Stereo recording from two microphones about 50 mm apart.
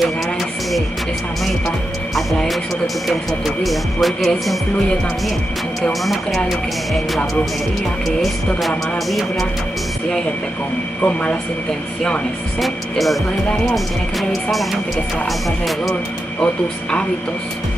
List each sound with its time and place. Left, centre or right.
3.1 s speech: centre
5.8 s speech: centre
8.6 s speech: centre
11.0 s speech: left
12.5 s speech: centre
14.3 s speech: centre